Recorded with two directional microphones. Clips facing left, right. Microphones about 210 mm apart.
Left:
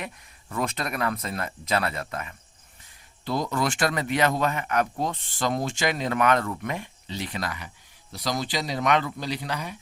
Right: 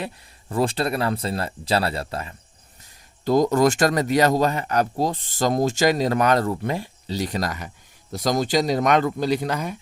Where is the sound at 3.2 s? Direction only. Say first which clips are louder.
Right 9 dB; 45° right (ahead or behind).